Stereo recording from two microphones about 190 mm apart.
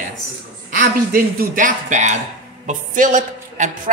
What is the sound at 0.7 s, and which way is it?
A man's voice, 45° right (ahead or behind).